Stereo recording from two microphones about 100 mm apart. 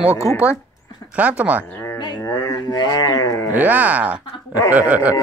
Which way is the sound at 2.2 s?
30° left (ahead or behind).